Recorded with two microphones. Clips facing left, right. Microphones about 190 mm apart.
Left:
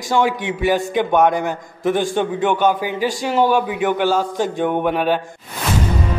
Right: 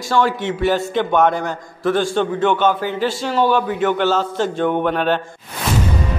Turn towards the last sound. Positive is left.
turn(degrees=10)  # may be behind; listen again after turning